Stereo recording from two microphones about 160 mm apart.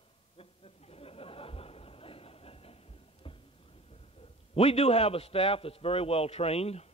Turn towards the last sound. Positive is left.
turn(degrees=40)  # may be behind; listen again after turning